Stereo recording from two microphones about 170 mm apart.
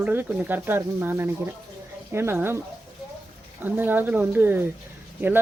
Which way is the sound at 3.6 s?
10° right (ahead or behind).